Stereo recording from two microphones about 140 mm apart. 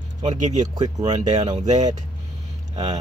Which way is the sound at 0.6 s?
30° right (ahead or behind).